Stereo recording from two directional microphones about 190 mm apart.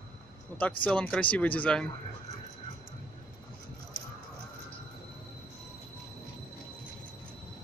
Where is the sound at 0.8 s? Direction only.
5° left (ahead or behind).